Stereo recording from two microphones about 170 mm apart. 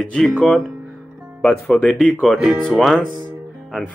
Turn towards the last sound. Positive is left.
turn(degrees=0)  # may be behind; listen again after turning